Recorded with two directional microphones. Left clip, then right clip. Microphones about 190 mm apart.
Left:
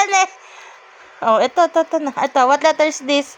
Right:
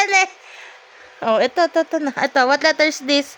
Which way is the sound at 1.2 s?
15° right (ahead or behind).